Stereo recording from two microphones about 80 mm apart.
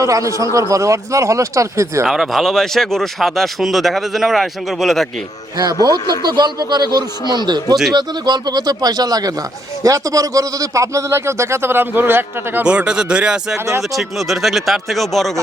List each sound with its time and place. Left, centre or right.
0.0 s a man's voice: right
2.0 s speech: centre
5.8 s speech: right
12.6 s speech: centre